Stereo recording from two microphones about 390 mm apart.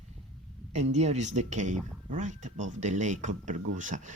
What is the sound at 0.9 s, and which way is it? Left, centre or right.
Speech, centre.